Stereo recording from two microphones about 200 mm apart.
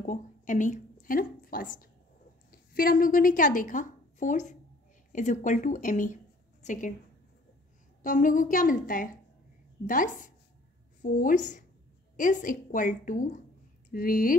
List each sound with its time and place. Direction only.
0.0 s a woman's voice: 40° left (ahead or behind)
8.0 s a woman's voice: 40° left (ahead or behind)